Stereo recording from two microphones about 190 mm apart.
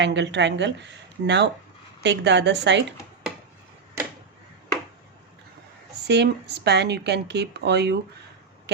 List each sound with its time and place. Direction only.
0.0 s speech: 65° right (ahead or behind)
6.1 s speech: 60° right (ahead or behind)